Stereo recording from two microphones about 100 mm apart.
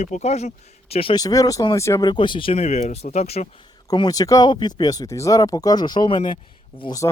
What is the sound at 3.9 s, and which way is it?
Speech, 40° left (ahead or behind).